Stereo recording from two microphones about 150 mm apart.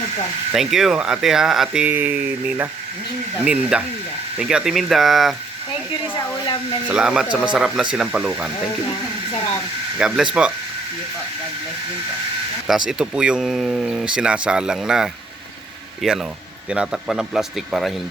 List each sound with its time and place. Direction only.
0.5 s speech: centre (ahead or behind)
6.1 s hair dryer: 30° left (ahead or behind)
6.8 s speech: 5° right (ahead or behind)
10.0 s speech: 5° right (ahead or behind)
12.6 s speech: 5° right (ahead or behind)